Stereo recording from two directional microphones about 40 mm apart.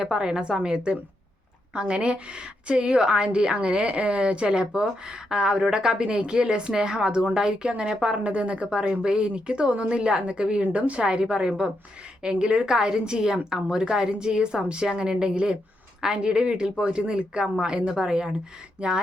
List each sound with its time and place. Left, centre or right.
0.0 s a woman's voice: right